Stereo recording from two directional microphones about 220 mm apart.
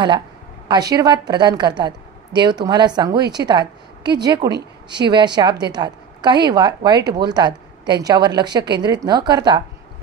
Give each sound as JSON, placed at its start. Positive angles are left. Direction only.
{"t": 0.7, "sound": "a woman's voice", "side_deg": -15}